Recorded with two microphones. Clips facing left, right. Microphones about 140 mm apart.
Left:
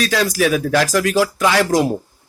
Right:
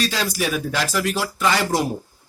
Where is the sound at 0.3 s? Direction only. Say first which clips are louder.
Left 7 dB; 90° left.